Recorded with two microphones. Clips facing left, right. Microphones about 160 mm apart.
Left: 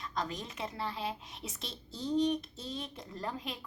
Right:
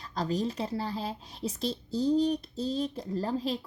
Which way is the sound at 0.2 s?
35° right (ahead or behind).